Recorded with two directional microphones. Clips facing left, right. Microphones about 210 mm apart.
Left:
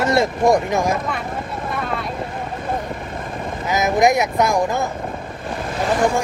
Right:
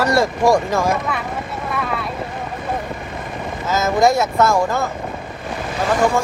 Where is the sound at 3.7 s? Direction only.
15° left (ahead or behind).